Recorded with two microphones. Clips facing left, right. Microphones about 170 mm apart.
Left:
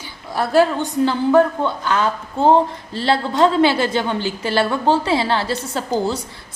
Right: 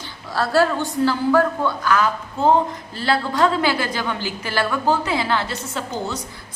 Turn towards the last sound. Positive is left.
turn(degrees=35)  # may be behind; listen again after turning